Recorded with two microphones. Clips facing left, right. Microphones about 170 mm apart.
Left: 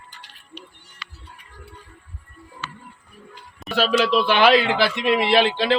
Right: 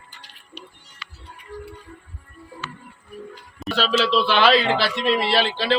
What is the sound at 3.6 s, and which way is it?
Speech, 15° left (ahead or behind).